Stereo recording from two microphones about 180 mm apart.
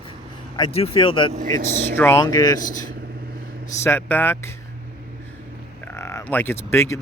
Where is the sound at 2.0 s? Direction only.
15° left (ahead or behind).